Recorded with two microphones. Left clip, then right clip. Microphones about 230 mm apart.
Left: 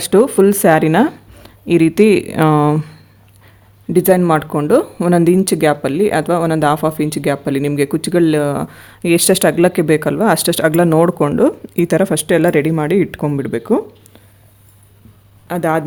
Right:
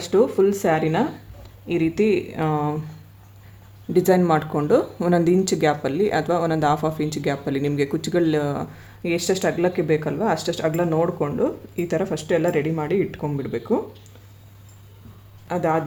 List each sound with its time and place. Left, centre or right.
0.0 s speech: left
3.9 s speech: left
15.4 s speech: left